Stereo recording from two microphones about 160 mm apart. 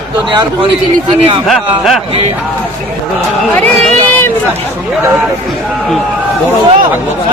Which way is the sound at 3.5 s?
10° left (ahead or behind).